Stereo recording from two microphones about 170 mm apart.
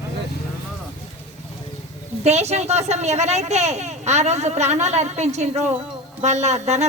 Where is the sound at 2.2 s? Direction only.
40° right (ahead or behind).